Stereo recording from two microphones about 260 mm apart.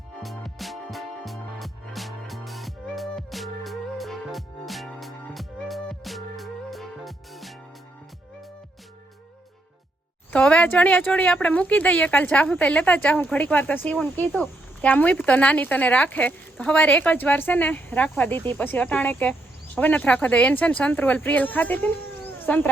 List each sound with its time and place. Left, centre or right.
0.2 s music: centre
10.3 s speech: centre